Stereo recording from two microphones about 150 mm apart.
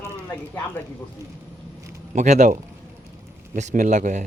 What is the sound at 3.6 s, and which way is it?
Speech, 55° right (ahead or behind).